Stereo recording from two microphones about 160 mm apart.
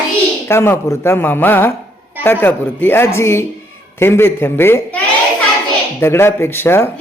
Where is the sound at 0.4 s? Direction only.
15° left (ahead or behind).